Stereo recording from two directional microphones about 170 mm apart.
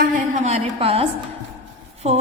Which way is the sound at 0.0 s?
40° right (ahead or behind).